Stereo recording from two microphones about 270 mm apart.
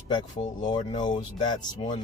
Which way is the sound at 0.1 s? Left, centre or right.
Centre.